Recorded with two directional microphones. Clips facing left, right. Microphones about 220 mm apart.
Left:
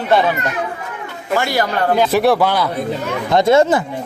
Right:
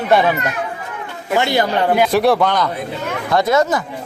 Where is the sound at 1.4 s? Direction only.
25° right (ahead or behind).